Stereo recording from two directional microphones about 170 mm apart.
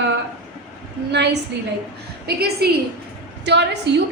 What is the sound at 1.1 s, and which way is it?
Speech, 80° right.